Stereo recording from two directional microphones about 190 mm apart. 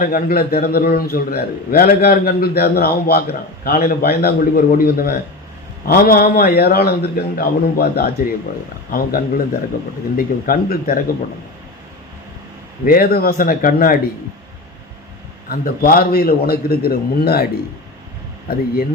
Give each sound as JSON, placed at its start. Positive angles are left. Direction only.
{"t": 0.0, "sound": "a man's voice", "side_deg": 50}
{"t": 12.8, "sound": "a man's voice", "side_deg": 50}
{"t": 15.4, "sound": "a man's voice", "side_deg": 50}
{"t": 18.4, "sound": "a man's voice", "side_deg": 50}